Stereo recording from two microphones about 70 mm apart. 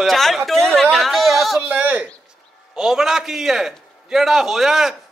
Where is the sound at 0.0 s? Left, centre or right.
Centre.